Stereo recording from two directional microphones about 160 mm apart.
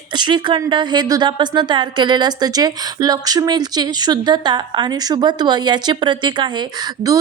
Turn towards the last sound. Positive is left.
turn(degrees=-25)  # may be behind; listen again after turning